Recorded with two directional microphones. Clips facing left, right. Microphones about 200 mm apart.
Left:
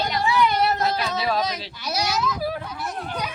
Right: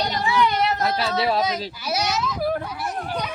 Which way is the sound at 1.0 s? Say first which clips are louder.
Right 2 dB; 30° right (ahead or behind).